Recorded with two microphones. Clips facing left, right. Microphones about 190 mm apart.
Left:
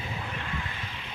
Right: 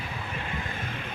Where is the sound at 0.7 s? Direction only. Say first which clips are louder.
Right 5 dB; 50° right (ahead or behind).